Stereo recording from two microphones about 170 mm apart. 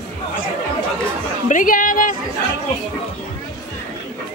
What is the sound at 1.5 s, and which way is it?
Speech, 50° left (ahead or behind).